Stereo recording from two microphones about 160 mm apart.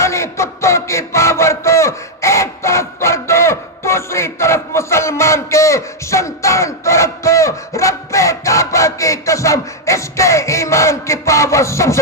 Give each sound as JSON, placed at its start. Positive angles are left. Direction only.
{"t": 0.0, "sound": "music", "side_deg": 15}